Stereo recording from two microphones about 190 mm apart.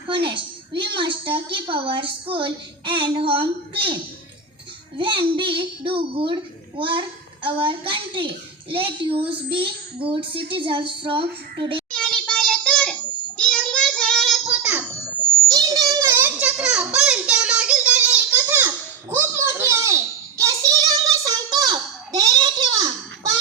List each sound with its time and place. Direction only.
0.1 s a woman's voice: 25° right (ahead or behind)
4.9 s a woman's voice: 25° right (ahead or behind)
11.9 s child singing: 5° left (ahead or behind)
15.4 s a sound: 20° right (ahead or behind)